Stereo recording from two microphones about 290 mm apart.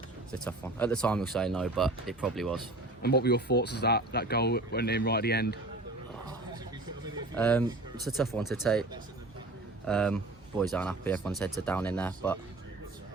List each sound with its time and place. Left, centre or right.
0.3 s speech: centre
3.0 s speech: left
7.3 s speech: centre